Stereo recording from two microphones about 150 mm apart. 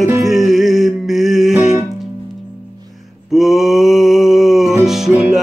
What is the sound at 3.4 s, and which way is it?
Music, centre (ahead or behind).